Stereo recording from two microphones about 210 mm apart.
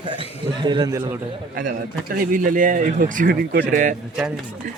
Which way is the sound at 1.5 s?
40° right (ahead or behind).